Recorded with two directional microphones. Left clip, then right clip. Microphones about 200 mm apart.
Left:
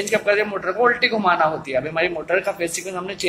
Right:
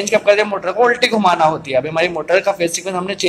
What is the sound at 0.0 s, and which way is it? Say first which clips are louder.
A man's voice: right 6 dB; 10° right (ahead or behind).